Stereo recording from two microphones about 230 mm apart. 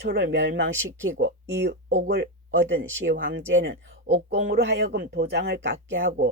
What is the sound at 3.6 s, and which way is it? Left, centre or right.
A woman's voice, right.